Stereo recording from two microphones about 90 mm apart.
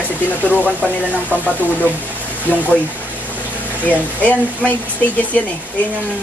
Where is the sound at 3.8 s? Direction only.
15° left (ahead or behind).